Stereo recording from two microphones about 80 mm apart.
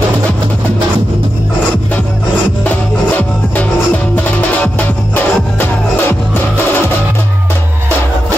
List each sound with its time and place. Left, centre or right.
2.6 s music: centre